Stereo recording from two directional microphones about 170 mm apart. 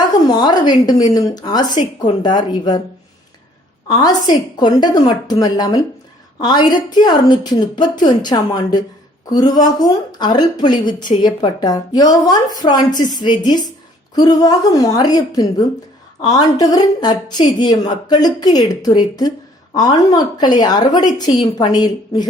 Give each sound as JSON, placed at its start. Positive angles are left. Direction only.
{"t": 0.1, "sound": "a woman's voice", "side_deg": 25}
{"t": 3.8, "sound": "a woman's voice", "side_deg": 25}